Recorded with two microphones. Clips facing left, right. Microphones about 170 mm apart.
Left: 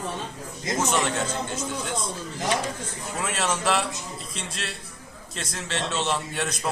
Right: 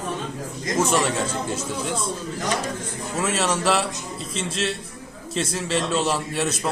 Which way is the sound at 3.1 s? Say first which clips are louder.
Right 4 dB; 5° right (ahead or behind).